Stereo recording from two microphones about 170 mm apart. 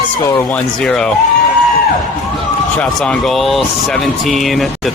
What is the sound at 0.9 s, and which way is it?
Speech, 5° left (ahead or behind).